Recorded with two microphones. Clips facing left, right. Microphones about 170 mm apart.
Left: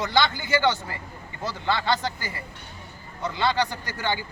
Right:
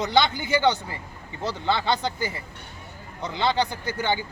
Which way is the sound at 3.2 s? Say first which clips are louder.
Even; 20° right (ahead or behind).